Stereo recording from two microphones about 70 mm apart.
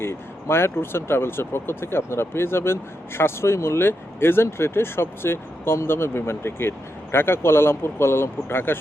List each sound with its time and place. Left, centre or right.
0.0 s speech: left